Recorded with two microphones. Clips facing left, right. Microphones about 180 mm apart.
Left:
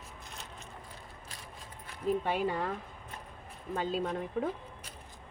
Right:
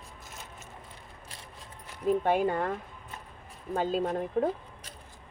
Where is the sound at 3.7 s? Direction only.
40° right (ahead or behind).